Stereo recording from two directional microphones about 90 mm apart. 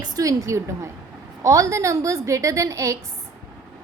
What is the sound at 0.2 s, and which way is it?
A woman's voice, 40° right (ahead or behind).